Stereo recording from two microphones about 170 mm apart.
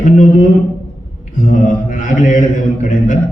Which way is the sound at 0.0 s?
50° left (ahead or behind).